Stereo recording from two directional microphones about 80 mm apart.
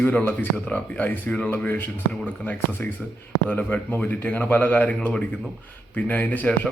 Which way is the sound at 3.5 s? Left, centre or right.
Left.